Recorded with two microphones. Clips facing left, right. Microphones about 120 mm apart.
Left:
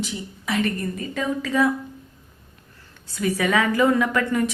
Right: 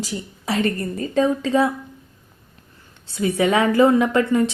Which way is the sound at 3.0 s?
25° right (ahead or behind).